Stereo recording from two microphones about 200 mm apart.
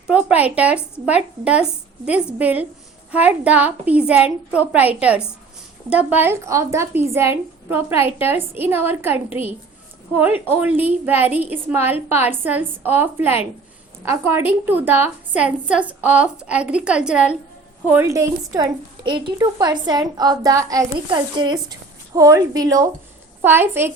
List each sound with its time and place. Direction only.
0.1 s a woman's voice: 5° right (ahead or behind)